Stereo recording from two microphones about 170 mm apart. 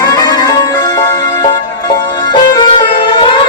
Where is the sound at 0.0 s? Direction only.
25° left (ahead or behind).